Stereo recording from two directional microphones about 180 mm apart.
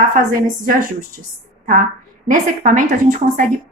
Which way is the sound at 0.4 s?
50° right (ahead or behind).